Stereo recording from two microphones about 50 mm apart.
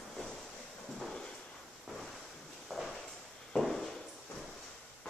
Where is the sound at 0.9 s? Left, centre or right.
Centre.